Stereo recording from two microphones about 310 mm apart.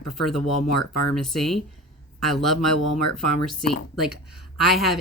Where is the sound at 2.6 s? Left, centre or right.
Left.